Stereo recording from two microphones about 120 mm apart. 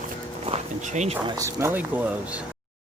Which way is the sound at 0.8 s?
80° right.